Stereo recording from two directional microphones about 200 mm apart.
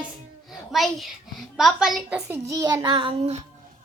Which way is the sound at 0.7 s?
Centre (ahead or behind).